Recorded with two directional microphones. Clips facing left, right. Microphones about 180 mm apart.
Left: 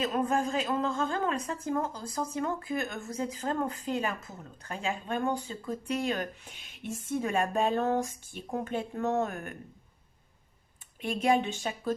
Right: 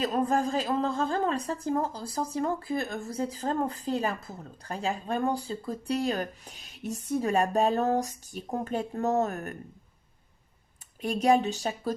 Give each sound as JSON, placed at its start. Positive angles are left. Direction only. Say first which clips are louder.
{"t": 0.0, "sound": "speech", "louder": "right 2 dB", "side_deg": -35}
{"t": 11.0, "sound": "speech", "louder": "right 3 dB", "side_deg": -40}